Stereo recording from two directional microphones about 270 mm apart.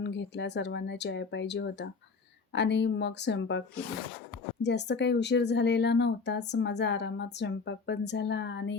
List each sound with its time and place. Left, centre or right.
0.0 s speech: left
4.6 s speech: left